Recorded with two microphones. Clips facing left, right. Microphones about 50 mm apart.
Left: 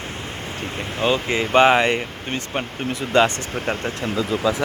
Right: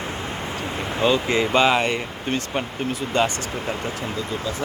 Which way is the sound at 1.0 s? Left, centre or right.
Centre.